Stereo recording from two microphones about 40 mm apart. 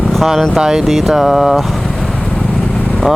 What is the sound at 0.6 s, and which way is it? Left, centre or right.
Speech, centre.